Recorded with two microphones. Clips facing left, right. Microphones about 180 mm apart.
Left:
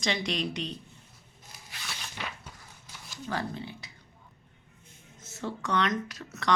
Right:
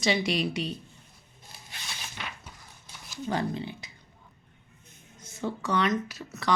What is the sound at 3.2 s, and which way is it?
Speech, 20° right (ahead or behind).